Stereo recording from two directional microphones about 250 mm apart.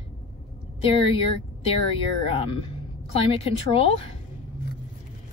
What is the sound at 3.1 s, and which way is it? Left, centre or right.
Speech, left.